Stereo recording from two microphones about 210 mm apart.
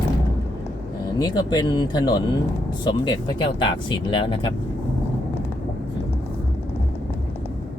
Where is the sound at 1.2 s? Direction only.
20° left (ahead or behind).